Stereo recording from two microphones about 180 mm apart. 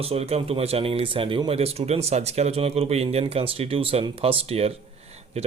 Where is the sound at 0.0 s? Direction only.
35° right (ahead or behind).